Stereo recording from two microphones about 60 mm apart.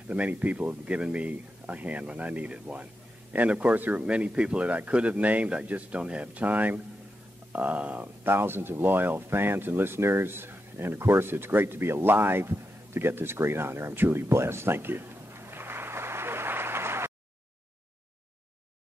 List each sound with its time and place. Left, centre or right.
0.1 s speech: right